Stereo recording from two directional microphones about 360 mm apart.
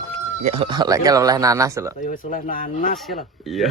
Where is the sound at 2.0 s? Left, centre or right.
Left.